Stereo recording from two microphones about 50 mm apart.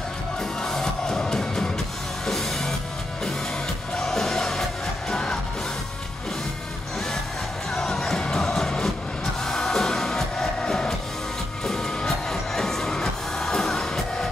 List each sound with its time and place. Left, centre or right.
0.4 s music: centre
7.7 s music: centre